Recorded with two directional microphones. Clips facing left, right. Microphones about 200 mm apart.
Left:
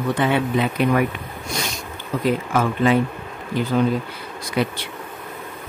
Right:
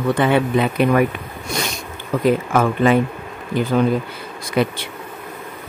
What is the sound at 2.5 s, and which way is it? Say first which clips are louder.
Speech: right 3 dB; 55° right (ahead or behind).